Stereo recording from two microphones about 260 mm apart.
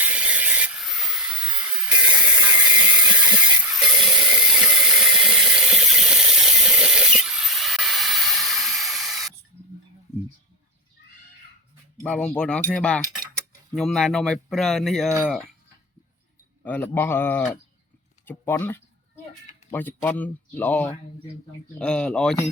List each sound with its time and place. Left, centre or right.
0.0 s a sound: centre
2.4 s ratchet: centre
2.9 s a sound: centre
3.7 s ratchet: centre
11.9 s speech: centre
16.6 s speech: centre